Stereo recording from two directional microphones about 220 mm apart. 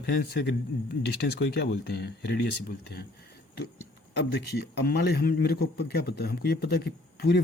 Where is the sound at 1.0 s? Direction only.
50° left (ahead or behind).